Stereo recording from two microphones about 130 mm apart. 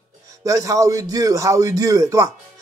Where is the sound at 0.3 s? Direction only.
25° right (ahead or behind).